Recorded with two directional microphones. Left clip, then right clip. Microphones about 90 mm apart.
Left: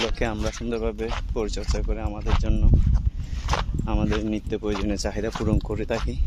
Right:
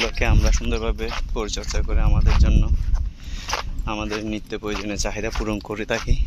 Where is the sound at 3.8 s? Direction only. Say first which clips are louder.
Even; 70° left (ahead or behind).